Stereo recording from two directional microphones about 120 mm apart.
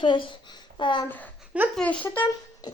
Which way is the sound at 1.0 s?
15° left (ahead or behind).